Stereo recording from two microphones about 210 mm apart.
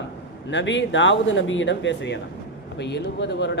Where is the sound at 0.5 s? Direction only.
60° left (ahead or behind).